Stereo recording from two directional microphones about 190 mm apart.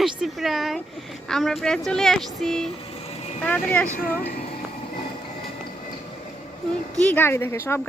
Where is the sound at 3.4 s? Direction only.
10° left (ahead or behind).